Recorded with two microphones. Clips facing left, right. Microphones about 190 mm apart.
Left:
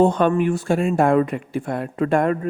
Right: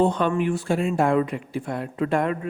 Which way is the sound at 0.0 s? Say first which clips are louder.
Left 4 dB; 45° left (ahead or behind).